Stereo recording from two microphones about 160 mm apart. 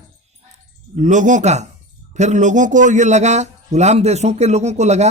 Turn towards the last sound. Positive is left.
turn(degrees=-45)  # may be behind; listen again after turning